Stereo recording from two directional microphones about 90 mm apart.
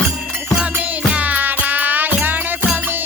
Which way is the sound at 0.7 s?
15° right (ahead or behind).